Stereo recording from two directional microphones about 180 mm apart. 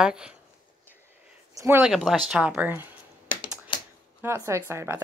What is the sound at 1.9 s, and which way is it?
A woman's voice, centre (ahead or behind).